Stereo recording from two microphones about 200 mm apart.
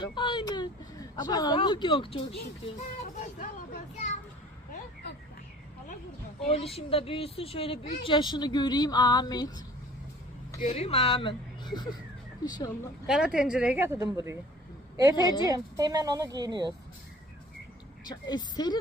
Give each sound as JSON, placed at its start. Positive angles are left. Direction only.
{"t": 0.0, "sound": "speech", "side_deg": 20}
{"t": 3.2, "sound": "speech", "side_deg": 40}
{"t": 6.5, "sound": "speech", "side_deg": 30}
{"t": 10.6, "sound": "speech", "side_deg": 30}
{"t": 13.1, "sound": "speech", "side_deg": -5}
{"t": 15.1, "sound": "speech", "side_deg": 20}
{"t": 15.4, "sound": "speech", "side_deg": -20}
{"t": 18.3, "sound": "speech", "side_deg": 20}